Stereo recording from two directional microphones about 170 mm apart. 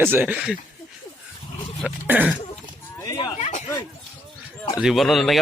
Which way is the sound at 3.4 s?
40° left (ahead or behind).